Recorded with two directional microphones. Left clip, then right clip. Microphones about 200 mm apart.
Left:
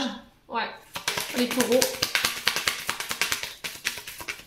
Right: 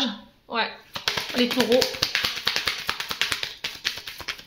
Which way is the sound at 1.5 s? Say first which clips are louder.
Right 1 dB; 30° right (ahead or behind).